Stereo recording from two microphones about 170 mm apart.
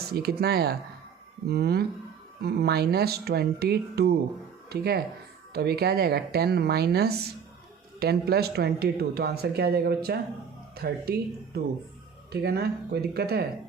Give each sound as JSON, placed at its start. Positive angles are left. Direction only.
{"t": 0.1, "sound": "speech", "side_deg": -65}